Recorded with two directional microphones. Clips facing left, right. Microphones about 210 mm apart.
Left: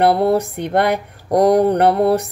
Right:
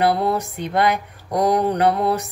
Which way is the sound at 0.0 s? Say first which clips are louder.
Left 5 dB; 60° left (ahead or behind).